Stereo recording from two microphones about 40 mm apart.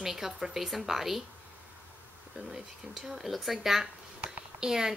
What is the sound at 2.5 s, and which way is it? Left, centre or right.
A woman's voice, centre.